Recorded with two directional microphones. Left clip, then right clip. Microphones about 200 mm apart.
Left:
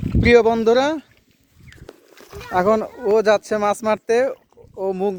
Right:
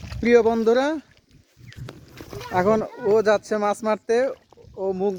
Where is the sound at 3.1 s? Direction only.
20° left (ahead or behind).